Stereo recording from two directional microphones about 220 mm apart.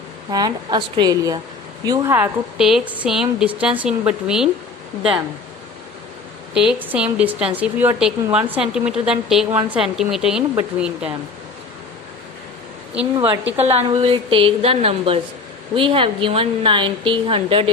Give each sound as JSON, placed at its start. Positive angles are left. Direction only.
{"t": 0.3, "sound": "a woman's voice", "side_deg": -15}
{"t": 6.5, "sound": "a woman's voice", "side_deg": -5}
{"t": 13.1, "sound": "a woman's voice", "side_deg": -20}